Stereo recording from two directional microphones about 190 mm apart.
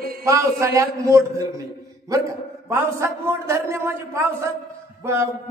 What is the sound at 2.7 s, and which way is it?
A man's voice, 15° right (ahead or behind).